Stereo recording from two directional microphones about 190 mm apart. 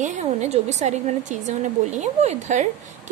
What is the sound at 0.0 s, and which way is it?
A woman's voice, 40° right (ahead or behind).